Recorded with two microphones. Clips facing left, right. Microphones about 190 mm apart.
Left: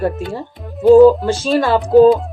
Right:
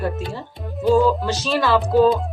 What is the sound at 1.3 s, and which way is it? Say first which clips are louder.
Speech: left 4 dB; 50° left (ahead or behind).